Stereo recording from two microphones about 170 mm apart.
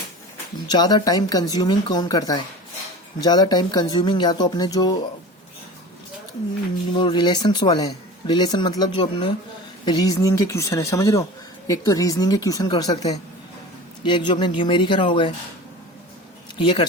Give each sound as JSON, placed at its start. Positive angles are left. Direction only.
{"t": 0.7, "sound": "speech", "side_deg": 25}
{"t": 6.9, "sound": "speech", "side_deg": 25}